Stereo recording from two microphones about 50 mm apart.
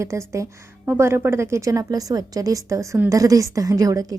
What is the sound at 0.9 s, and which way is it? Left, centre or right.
A woman's voice, right.